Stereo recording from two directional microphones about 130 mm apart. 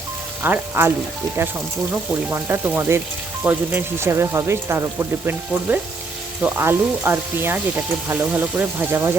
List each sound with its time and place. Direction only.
0.4 s speech: 15° right (ahead or behind)